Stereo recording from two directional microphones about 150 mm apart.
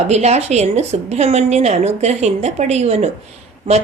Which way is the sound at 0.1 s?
45° right (ahead or behind).